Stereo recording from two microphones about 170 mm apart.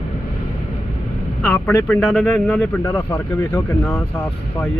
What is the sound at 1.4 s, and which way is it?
Speech, 10° left (ahead or behind).